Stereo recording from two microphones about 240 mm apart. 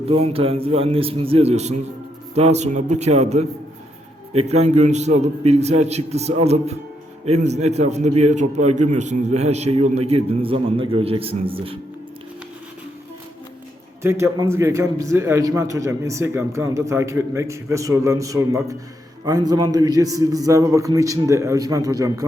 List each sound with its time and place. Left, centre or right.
0.1 s a man's voice: right
14.0 s a man's voice: centre